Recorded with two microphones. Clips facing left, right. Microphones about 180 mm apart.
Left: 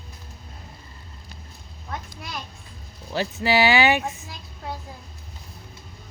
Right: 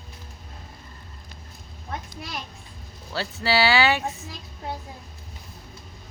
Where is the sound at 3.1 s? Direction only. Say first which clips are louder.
Left 3 dB; 15° left (ahead or behind).